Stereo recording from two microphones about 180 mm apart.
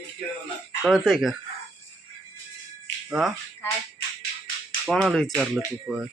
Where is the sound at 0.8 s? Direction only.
Centre (ahead or behind).